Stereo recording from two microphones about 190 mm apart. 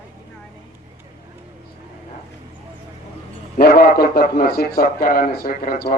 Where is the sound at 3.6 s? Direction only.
50° left (ahead or behind).